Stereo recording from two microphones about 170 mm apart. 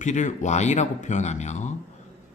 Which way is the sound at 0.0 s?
45° left (ahead or behind).